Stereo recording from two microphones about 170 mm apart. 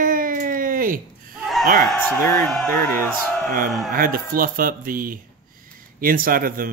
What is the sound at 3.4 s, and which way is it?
A man's voice, 50° right (ahead or behind).